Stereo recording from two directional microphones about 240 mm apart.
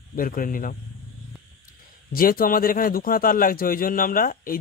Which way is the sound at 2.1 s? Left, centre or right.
Left.